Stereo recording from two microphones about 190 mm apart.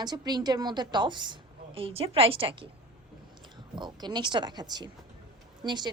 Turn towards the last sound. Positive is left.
turn(degrees=-20)  # may be behind; listen again after turning